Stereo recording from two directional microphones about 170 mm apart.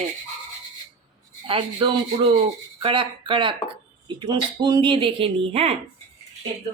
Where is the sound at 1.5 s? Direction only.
30° right (ahead or behind).